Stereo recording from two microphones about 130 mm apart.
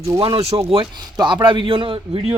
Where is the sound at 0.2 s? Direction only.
45° right (ahead or behind).